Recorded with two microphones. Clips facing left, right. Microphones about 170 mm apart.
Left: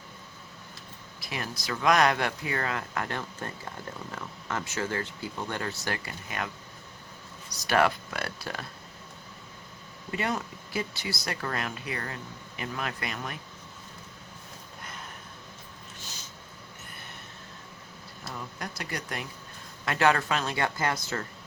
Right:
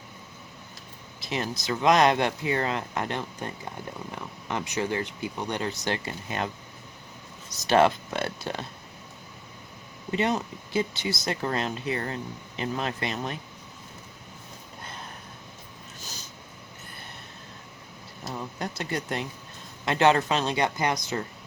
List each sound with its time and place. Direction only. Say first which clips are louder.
1.2 s speech: right 6 dB; 25° right (ahead or behind)
7.5 s speech: right 4 dB; 25° right (ahead or behind)
10.1 s speech: right 5 dB; 20° right (ahead or behind)
18.2 s speech: right 5 dB; 25° right (ahead or behind)